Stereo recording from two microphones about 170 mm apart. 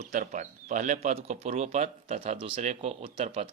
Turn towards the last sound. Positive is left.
turn(degrees=-35)  # may be behind; listen again after turning